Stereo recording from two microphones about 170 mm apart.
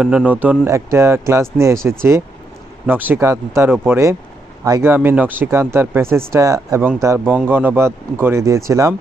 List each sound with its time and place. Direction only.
0.0 s speech: 5° right (ahead or behind)